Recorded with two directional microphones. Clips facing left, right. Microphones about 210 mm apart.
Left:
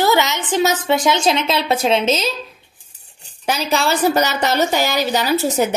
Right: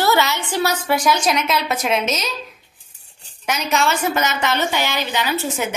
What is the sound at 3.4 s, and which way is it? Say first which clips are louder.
A woman's voice: left 2 dB; 35° left (ahead or behind).